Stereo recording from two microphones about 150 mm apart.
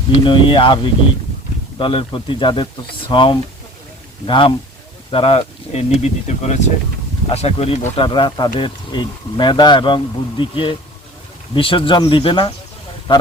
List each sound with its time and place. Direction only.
0.3 s speech: 35° left (ahead or behind)
1.8 s speech: 35° left (ahead or behind)